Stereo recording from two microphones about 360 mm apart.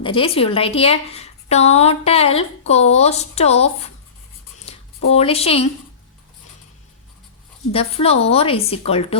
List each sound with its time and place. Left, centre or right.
0.0 s a woman's voice: centre
5.1 s a woman's voice: centre
7.7 s a woman's voice: centre